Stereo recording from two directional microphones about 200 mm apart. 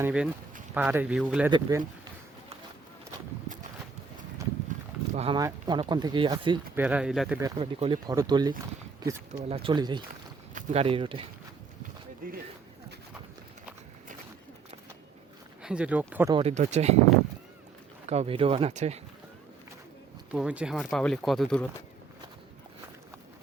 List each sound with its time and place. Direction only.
0.0 s speech: 5° right (ahead or behind)
1.5 s speech: 20° right (ahead or behind)
5.1 s speech: 30° right (ahead or behind)
5.4 s speech: 20° right (ahead or behind)
6.7 s speech: 5° right (ahead or behind)
7.3 s speech: 20° right (ahead or behind)
9.5 s speech: 25° right (ahead or behind)
10.5 s speech: 35° right (ahead or behind)
12.2 s speech: 45° right (ahead or behind)
15.6 s speech: 5° right (ahead or behind)
16.3 s speech: 30° right (ahead or behind)
18.1 s speech: 30° right (ahead or behind)
20.3 s speech: 5° right (ahead or behind)